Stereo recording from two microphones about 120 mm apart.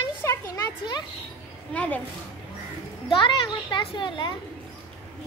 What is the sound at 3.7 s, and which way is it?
Speech, 40° left (ahead or behind).